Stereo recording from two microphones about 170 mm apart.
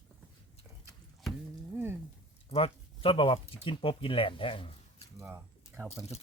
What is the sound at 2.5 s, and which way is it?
Speech, 30° left (ahead or behind).